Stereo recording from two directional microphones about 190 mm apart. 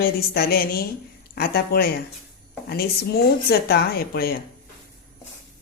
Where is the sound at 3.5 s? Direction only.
55° left (ahead or behind).